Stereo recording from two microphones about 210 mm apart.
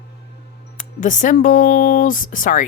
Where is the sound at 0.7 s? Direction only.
40° left (ahead or behind).